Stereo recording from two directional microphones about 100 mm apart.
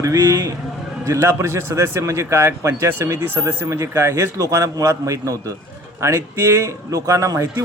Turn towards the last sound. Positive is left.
turn(degrees=-35)  # may be behind; listen again after turning